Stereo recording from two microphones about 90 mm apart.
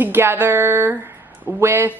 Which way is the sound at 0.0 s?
25° right (ahead or behind).